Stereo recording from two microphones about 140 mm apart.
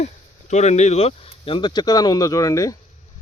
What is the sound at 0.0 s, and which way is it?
Speech, 55° left (ahead or behind).